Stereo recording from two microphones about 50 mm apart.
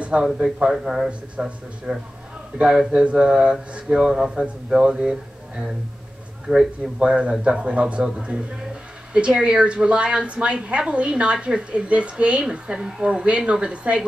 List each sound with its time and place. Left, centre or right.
0.2 s a man's voice: centre
6.5 s a man's voice: centre